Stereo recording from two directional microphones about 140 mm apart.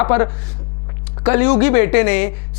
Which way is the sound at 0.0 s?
20° left (ahead or behind).